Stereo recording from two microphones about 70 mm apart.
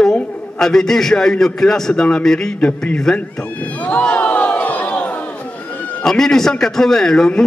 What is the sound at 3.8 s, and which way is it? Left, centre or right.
Crowd, centre.